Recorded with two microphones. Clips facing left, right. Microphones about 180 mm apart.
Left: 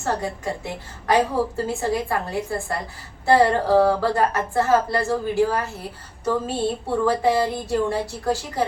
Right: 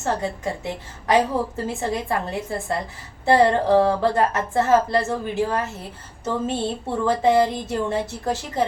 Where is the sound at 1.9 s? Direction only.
20° right (ahead or behind).